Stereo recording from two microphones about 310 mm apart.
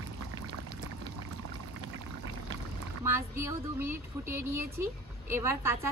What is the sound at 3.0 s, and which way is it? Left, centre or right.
A woman's voice, centre.